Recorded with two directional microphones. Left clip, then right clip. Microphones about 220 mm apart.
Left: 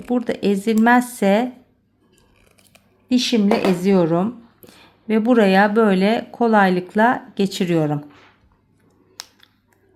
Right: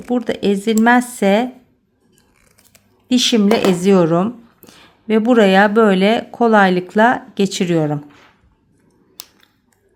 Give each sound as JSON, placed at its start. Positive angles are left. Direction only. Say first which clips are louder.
{"t": 0.0, "sound": "a woman's voice", "louder": "right 3 dB", "side_deg": -5}
{"t": 3.1, "sound": "a woman's voice", "louder": "right 4 dB", "side_deg": -20}